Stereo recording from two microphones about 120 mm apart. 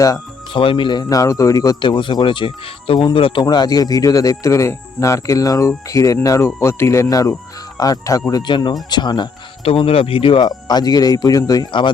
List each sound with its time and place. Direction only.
0.5 s speech: 45° left (ahead or behind)
3.4 s speech: 35° left (ahead or behind)
9.6 s speech: 55° left (ahead or behind)